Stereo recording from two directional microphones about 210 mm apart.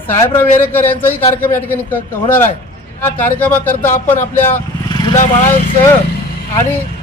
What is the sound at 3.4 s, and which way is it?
Speech, 10° left (ahead or behind).